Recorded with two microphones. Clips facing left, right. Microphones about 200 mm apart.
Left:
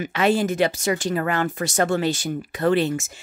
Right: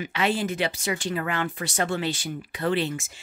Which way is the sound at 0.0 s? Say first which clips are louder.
Left 5 dB; 45° left (ahead or behind).